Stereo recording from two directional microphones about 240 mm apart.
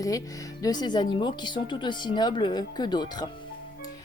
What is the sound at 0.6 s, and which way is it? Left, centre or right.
Speech, centre.